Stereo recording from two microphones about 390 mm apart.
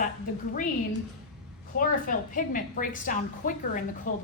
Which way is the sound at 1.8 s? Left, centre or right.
Left.